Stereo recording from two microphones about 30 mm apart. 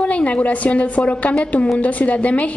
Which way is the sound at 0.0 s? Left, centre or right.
Left.